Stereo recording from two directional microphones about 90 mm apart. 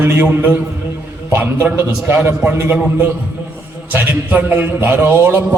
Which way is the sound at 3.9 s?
20° right (ahead or behind).